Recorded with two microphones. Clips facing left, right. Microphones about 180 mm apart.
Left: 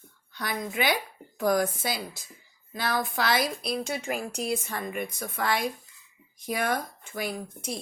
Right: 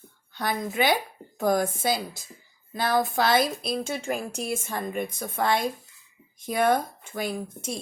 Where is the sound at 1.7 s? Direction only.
50° right (ahead or behind).